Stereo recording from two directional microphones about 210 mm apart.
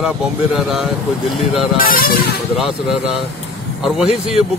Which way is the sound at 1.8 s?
45° left (ahead or behind).